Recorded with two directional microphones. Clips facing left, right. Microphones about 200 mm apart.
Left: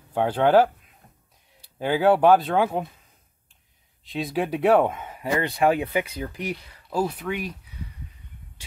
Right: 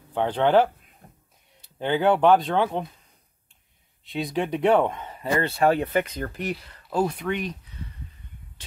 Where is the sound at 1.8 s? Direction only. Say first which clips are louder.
Left 1 dB; 5° left (ahead or behind).